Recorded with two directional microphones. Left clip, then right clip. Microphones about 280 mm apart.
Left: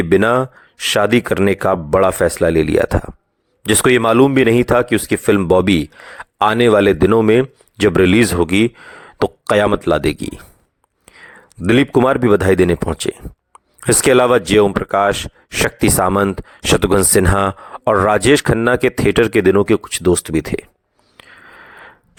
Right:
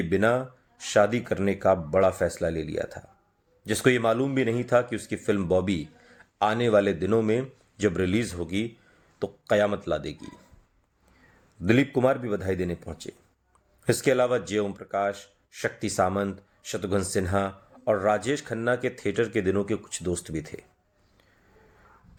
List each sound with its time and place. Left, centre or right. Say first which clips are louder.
0.0 s speech: left 11 dB; left
11.6 s speech: left 10 dB; left